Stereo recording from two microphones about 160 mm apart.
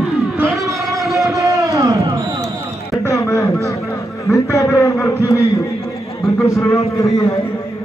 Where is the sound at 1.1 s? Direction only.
20° right (ahead or behind).